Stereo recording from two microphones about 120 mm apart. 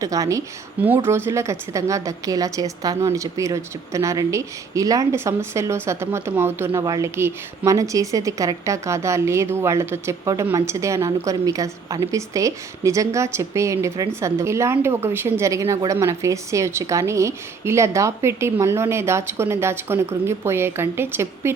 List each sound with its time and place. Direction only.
0.0 s a woman's voice: 30° right (ahead or behind)
0.8 s a woman's voice: 15° right (ahead or behind)
6.8 s a woman's voice: 30° right (ahead or behind)